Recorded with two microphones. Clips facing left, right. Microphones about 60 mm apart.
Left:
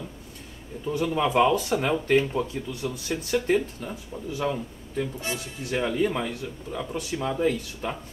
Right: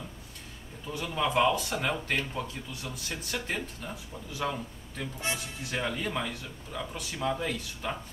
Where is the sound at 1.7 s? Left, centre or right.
Centre.